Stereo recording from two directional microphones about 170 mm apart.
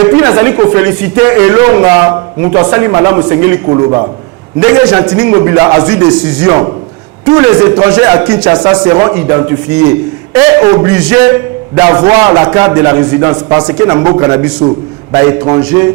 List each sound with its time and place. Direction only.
0.0 s a man's voice: 15° right (ahead or behind)
10.9 s speech: 10° right (ahead or behind)